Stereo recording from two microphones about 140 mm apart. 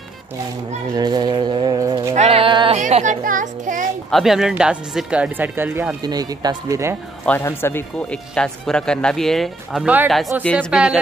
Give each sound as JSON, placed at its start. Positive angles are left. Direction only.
{"t": 0.9, "sound": "a sound", "side_deg": -30}
{"t": 2.1, "sound": "music", "side_deg": -50}
{"t": 2.8, "sound": "children playing", "side_deg": -60}
{"t": 4.1, "sound": "speech", "side_deg": 0}
{"t": 6.0, "sound": "speech", "side_deg": -30}
{"t": 7.2, "sound": "speech", "side_deg": 15}
{"t": 9.8, "sound": "speech", "side_deg": -10}
{"t": 10.4, "sound": "speech", "side_deg": 5}
{"t": 10.7, "sound": "speech", "side_deg": -5}